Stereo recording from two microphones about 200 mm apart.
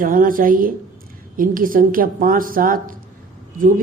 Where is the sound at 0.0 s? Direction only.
45° right (ahead or behind).